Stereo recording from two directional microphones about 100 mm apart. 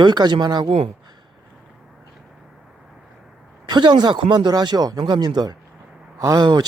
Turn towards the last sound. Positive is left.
turn(degrees=-45)  # may be behind; listen again after turning